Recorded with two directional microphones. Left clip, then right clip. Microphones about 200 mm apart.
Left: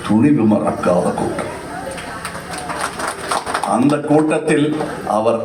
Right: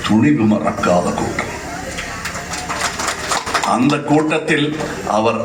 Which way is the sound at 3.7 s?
55° left (ahead or behind).